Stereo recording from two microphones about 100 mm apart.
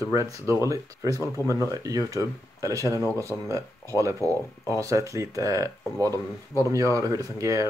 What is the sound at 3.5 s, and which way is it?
Speech, 30° right (ahead or behind).